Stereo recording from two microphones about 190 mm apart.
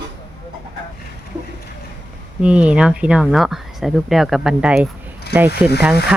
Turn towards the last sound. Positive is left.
turn(degrees=-5)  # may be behind; listen again after turning